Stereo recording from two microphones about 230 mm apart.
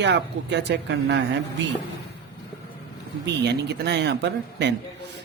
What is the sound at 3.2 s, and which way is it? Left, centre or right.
Speech, right.